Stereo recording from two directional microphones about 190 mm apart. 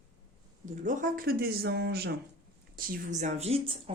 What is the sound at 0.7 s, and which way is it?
A woman's voice, 45° right (ahead or behind).